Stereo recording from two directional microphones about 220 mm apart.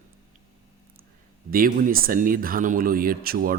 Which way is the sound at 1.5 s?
40° right (ahead or behind).